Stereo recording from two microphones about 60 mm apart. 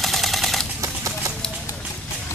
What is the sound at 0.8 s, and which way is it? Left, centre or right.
Horse, right.